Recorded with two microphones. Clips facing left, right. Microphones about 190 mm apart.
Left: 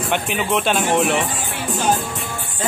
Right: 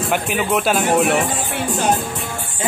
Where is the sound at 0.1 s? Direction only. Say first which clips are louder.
Right 1 dB; 5° right (ahead or behind).